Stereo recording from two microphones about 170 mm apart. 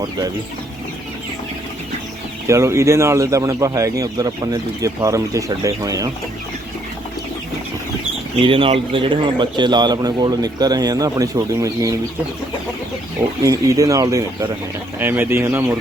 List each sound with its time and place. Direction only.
2.5 s speech: 15° right (ahead or behind)
8.4 s speech: 30° right (ahead or behind)
13.4 s speech: 20° right (ahead or behind)